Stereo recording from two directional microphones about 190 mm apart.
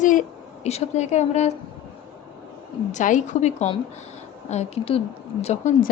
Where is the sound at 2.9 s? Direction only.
40° left (ahead or behind).